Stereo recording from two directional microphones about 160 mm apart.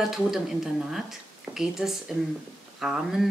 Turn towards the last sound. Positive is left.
turn(degrees=-5)  # may be behind; listen again after turning